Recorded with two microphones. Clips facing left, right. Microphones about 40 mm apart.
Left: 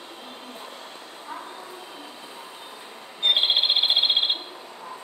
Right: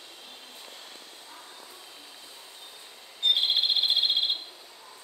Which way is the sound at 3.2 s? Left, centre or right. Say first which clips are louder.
Left 4 dB; left.